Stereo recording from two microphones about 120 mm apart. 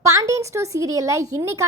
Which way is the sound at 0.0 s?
25° right (ahead or behind).